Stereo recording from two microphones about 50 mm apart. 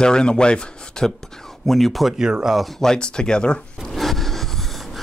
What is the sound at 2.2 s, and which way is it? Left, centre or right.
Speech, centre.